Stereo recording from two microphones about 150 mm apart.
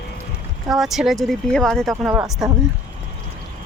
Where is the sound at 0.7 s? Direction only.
Centre (ahead or behind).